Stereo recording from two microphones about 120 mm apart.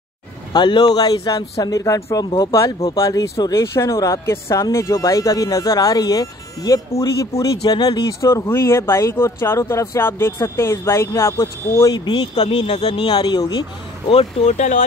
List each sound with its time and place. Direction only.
0.5 s speech: 40° left (ahead or behind)
2.2 s speech: 35° left (ahead or behind)
2.5 s speech: 25° left (ahead or behind)
8.3 s speech: 25° left (ahead or behind)
11.9 s speech: 40° left (ahead or behind)
14.0 s speech: 50° left (ahead or behind)